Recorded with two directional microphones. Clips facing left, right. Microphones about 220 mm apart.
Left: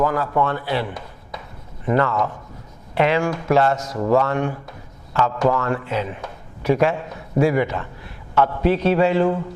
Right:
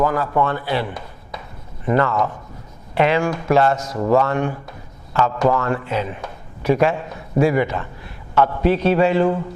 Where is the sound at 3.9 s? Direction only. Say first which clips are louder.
Right 1 dB; 25° right (ahead or behind).